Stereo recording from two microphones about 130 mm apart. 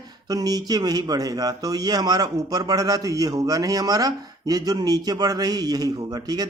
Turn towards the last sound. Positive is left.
turn(degrees=-30)  # may be behind; listen again after turning